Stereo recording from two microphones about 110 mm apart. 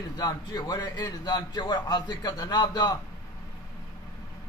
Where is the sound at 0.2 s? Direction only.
40° left (ahead or behind).